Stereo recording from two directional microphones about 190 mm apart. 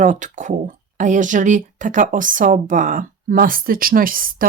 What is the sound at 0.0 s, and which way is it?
Speech, 40° right (ahead or behind).